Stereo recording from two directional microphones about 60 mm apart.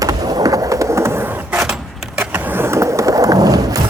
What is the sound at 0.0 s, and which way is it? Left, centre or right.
Skateboard, right.